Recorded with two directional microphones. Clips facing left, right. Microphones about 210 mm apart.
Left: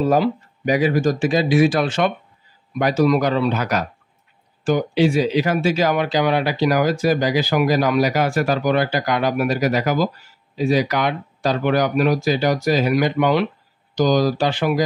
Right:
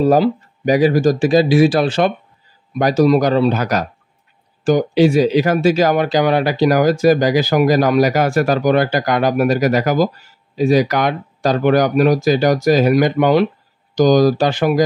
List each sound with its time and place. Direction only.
0.0 s speech: 35° right (ahead or behind)